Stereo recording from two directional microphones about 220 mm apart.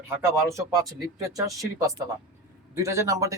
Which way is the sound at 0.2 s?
10° right (ahead or behind).